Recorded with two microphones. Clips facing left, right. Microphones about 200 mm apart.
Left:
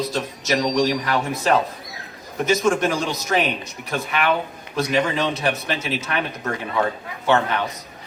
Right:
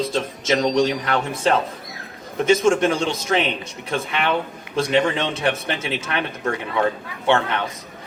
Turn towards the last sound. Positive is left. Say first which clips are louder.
# even
turn(degrees=-25)  # may be behind; listen again after turning